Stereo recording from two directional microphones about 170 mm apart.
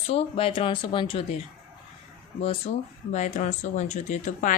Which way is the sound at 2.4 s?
40° left (ahead or behind).